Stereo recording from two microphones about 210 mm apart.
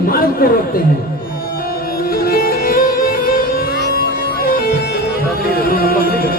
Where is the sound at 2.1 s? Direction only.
45° left (ahead or behind).